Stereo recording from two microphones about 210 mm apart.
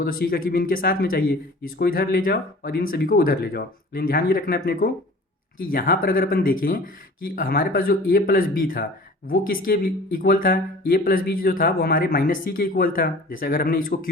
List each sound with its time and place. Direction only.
0.0 s speech: 45° left (ahead or behind)